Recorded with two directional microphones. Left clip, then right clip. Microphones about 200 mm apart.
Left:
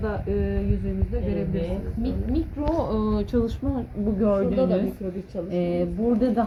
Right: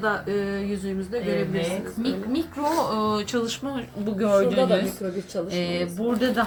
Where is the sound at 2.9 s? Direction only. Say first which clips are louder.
Right 1 dB; 20° left (ahead or behind).